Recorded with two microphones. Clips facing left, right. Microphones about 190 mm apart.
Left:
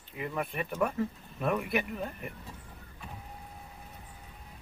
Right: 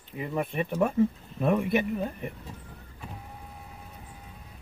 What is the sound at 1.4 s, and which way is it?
Speech, 25° right (ahead or behind).